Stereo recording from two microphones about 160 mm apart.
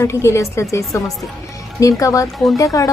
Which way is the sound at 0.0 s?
15° left (ahead or behind).